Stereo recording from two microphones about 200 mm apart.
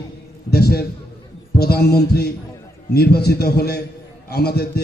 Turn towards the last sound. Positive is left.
turn(degrees=50)  # may be behind; listen again after turning